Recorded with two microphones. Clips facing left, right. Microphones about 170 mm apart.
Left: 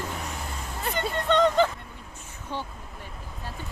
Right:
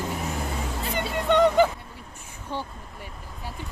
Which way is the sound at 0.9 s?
10° right (ahead or behind).